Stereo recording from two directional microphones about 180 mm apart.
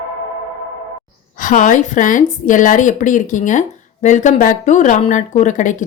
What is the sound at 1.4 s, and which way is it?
A woman's voice, 45° left (ahead or behind).